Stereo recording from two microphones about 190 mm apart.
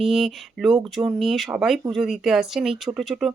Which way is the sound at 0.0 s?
Centre (ahead or behind).